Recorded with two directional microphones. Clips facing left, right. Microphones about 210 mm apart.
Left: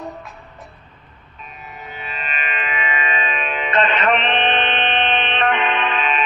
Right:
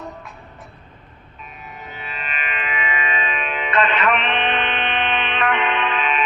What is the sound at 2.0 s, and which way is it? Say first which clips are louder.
Music: left 2 dB; 25° left (ahead or behind).